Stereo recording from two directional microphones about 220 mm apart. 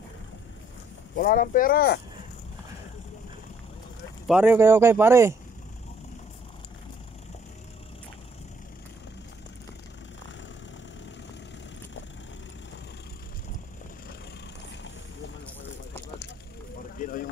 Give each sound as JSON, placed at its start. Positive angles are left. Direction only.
{"t": 1.1, "sound": "speech", "side_deg": 40}
{"t": 4.3, "sound": "speech", "side_deg": -5}
{"t": 17.0, "sound": "a sound", "side_deg": 40}